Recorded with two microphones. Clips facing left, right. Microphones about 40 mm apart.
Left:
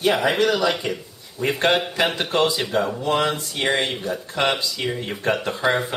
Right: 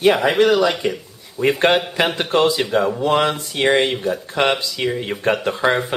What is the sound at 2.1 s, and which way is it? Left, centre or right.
Speech, centre.